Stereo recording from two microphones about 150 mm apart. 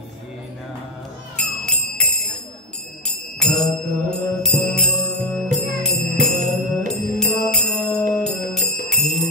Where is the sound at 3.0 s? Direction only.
Centre (ahead or behind).